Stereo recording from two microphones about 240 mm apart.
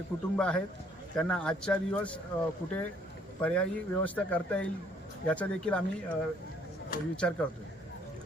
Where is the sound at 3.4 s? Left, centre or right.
Centre.